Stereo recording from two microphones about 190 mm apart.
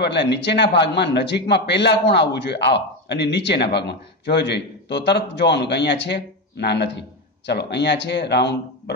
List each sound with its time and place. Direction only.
0.0 s a man's voice: 65° left (ahead or behind)